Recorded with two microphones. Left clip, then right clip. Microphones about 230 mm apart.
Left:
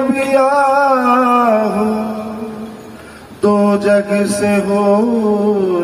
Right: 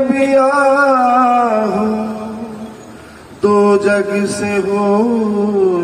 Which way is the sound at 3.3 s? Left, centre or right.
Left.